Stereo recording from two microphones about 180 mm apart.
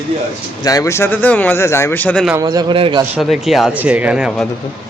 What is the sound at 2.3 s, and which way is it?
Speech, 20° right (ahead or behind).